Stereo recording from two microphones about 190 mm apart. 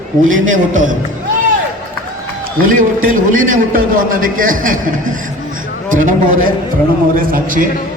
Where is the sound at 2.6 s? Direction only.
45° right (ahead or behind).